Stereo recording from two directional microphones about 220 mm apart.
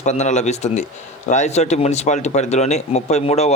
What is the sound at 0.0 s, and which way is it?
A man's voice, 30° left (ahead or behind).